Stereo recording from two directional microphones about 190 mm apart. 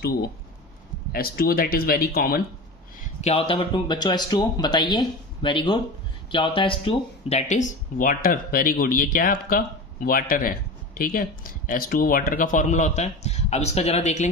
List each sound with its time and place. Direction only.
1.1 s speech: 50° left (ahead or behind)
3.0 s speech: 35° left (ahead or behind)